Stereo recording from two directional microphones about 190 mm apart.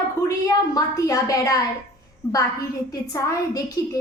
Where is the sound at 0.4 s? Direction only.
20° left (ahead or behind).